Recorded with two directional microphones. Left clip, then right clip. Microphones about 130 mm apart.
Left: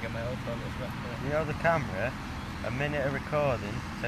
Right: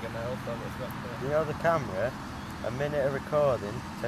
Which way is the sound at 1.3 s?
65° right (ahead or behind).